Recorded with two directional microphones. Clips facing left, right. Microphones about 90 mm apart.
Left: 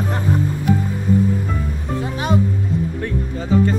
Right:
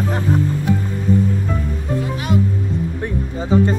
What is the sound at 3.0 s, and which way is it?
Speech, 20° right (ahead or behind).